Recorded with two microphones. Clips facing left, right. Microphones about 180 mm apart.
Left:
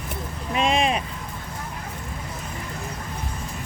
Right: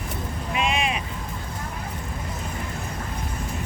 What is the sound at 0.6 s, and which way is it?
Speech, 35° left (ahead or behind).